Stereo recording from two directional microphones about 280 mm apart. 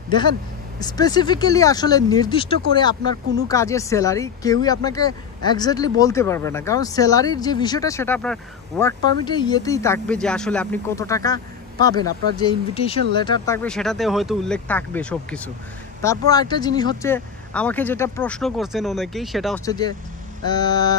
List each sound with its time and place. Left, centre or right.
0.7 s speech: centre
19.6 s speech: centre